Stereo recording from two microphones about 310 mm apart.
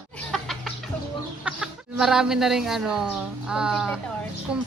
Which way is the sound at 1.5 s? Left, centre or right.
Centre.